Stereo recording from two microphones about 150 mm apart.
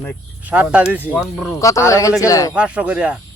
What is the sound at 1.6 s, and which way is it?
Speech, 20° left (ahead or behind).